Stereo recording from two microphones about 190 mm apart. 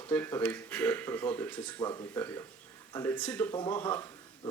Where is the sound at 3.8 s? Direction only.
10° left (ahead or behind).